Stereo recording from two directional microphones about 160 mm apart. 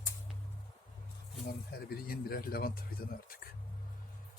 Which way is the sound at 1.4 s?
70° left (ahead or behind).